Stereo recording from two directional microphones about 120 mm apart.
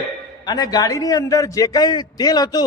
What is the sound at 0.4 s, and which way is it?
A man's voice, 35° left (ahead or behind).